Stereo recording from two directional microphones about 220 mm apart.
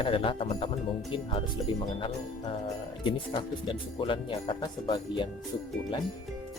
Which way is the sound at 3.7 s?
20° left (ahead or behind).